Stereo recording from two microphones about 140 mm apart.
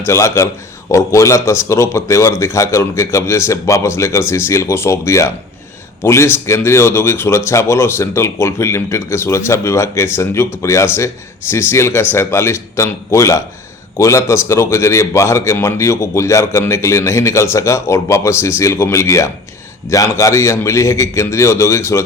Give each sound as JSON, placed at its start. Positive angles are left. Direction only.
{"t": 0.0, "sound": "speech", "side_deg": 20}